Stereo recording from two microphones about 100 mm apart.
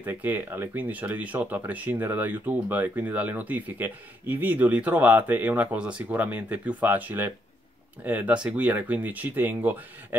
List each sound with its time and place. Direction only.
0.0 s speech: 20° right (ahead or behind)